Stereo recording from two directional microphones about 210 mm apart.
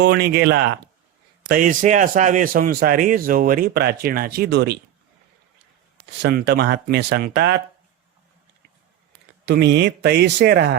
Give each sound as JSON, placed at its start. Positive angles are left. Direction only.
{"t": 0.0, "sound": "a man's voice", "side_deg": -50}
{"t": 1.5, "sound": "a man's voice", "side_deg": -40}
{"t": 6.2, "sound": "a man's voice", "side_deg": -50}
{"t": 9.5, "sound": "a man's voice", "side_deg": -55}